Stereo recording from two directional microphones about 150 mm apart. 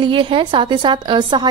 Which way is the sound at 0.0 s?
35° right (ahead or behind).